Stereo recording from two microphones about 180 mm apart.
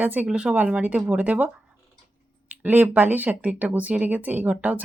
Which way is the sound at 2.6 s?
10° right (ahead or behind).